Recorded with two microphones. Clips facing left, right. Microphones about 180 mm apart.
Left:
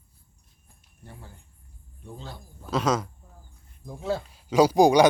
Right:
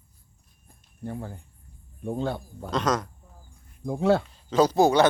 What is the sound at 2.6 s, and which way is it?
Speech, 5° left (ahead or behind).